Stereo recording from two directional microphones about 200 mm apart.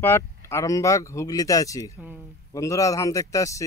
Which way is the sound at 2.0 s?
10° right (ahead or behind).